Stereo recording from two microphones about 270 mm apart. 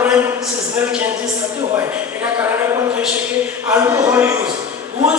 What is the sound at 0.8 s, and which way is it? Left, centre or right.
Speech, centre.